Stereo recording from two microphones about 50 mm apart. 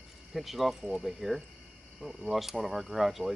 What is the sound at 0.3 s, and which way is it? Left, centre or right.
Speech, centre.